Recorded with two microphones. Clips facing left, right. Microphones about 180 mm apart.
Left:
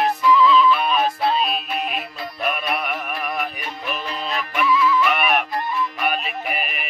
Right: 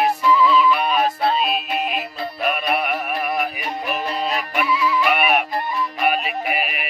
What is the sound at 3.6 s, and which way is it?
Music, 40° right (ahead or behind).